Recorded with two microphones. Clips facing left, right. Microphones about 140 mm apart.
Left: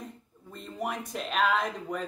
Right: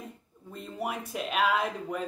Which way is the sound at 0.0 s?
5° right (ahead or behind).